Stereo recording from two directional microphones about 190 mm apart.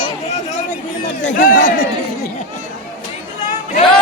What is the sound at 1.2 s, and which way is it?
Speech, 45° left (ahead or behind).